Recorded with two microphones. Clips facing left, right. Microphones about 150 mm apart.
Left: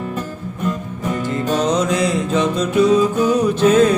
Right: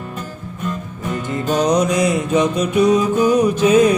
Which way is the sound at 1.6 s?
15° right (ahead or behind).